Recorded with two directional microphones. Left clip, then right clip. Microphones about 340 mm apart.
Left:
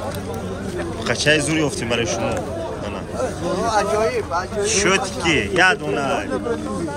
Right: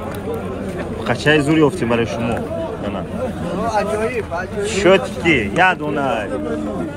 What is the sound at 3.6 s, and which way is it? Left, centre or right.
Speech, left.